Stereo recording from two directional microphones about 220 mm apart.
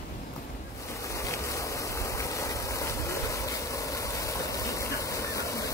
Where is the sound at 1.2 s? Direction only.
15° left (ahead or behind).